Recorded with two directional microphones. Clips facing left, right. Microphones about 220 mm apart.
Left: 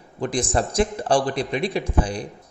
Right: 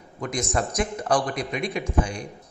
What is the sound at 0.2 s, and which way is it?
A man's voice, 30° left (ahead or behind).